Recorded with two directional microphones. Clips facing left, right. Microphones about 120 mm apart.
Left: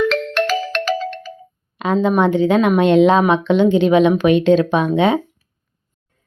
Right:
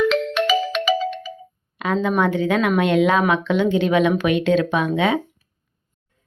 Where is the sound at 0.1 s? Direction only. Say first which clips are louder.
Even; centre (ahead or behind).